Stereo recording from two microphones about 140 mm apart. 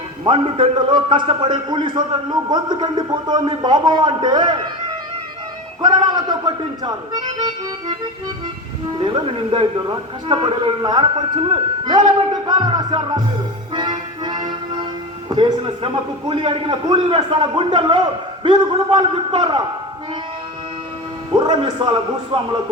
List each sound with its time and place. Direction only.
0.3 s a man's voice: 40° right (ahead or behind)
5.8 s speech: 30° right (ahead or behind)
9.0 s a man's voice: 40° right (ahead or behind)
13.7 s music: 30° right (ahead or behind)
15.3 s a man's voice: 30° right (ahead or behind)
21.5 s a man's voice: 35° right (ahead or behind)